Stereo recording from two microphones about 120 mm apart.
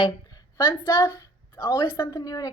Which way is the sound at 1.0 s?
25° left (ahead or behind).